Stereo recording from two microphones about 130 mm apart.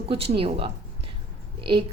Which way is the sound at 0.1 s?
45° right (ahead or behind).